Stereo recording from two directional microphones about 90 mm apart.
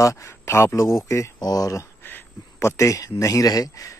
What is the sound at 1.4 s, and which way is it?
Speech, 45° left (ahead or behind).